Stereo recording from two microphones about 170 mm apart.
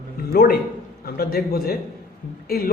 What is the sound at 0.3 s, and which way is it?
A man's voice, 65° left (ahead or behind).